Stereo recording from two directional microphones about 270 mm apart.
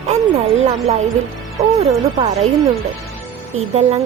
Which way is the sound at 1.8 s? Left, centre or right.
Right.